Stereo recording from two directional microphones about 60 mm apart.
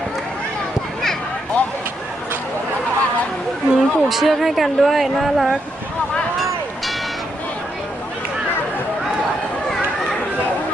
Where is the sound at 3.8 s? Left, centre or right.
Centre.